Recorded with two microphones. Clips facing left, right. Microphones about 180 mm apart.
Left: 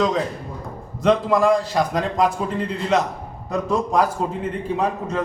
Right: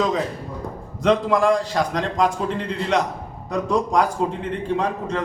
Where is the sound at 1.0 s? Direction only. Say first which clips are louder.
Left 1 dB; centre (ahead or behind).